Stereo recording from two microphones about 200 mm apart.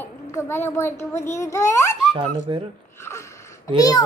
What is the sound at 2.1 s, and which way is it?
Speech, 25° right (ahead or behind).